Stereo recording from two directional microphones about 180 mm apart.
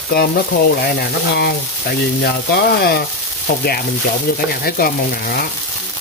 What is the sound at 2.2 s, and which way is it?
Speech, 60° left (ahead or behind).